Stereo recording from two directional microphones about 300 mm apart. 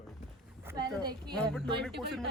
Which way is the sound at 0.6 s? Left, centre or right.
Centre.